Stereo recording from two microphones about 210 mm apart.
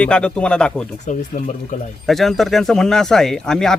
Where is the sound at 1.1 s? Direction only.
35° left (ahead or behind).